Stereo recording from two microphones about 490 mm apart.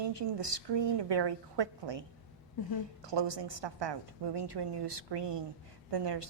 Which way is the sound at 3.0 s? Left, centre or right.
Right.